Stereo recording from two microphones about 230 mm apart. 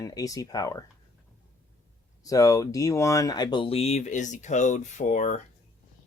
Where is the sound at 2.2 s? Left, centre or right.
Centre.